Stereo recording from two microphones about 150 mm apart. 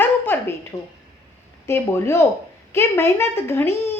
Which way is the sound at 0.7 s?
25° left (ahead or behind).